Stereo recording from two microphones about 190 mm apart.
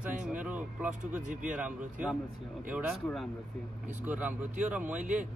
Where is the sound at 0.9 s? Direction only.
40° right (ahead or behind).